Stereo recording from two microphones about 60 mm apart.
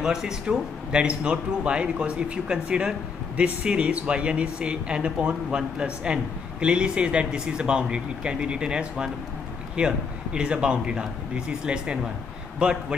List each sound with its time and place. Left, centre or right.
0.0 s a man's voice: centre